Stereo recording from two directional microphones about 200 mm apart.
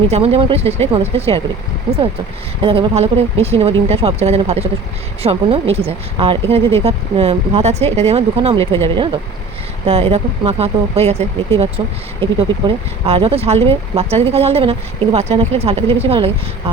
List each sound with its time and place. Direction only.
0.1 s speech: 30° right (ahead or behind)
2.6 s speech: 25° right (ahead or behind)